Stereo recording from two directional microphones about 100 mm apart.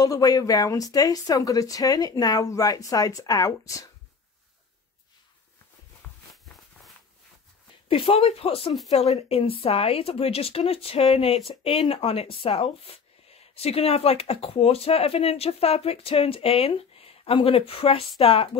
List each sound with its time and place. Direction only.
0.0 s speech: 40° left (ahead or behind)
7.9 s speech: 70° left (ahead or behind)